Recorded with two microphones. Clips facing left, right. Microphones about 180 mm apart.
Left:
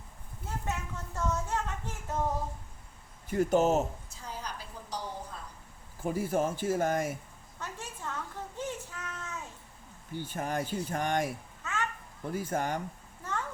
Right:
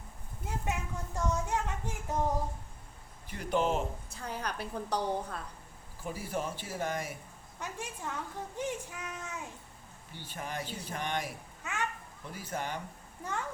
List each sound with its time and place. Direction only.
0.4 s a sound: 15° right (ahead or behind)
3.2 s speech: 45° left (ahead or behind)
4.1 s a woman's voice: 60° right (ahead or behind)
6.0 s speech: 50° left (ahead or behind)
7.6 s a child's voice: 15° right (ahead or behind)
10.1 s speech: 50° left (ahead or behind)
11.6 s children playing: 15° right (ahead or behind)
12.3 s speech: 50° left (ahead or behind)
13.2 s a sound: 15° right (ahead or behind)